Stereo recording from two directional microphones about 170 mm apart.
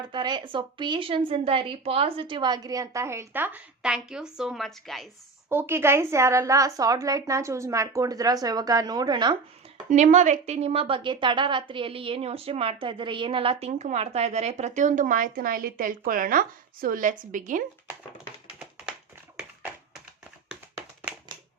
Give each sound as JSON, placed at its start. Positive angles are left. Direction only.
{"t": 0.0, "sound": "a woman's voice", "side_deg": -25}
{"t": 5.5, "sound": "a woman's voice", "side_deg": -15}
{"t": 9.9, "sound": "a woman's voice", "side_deg": -45}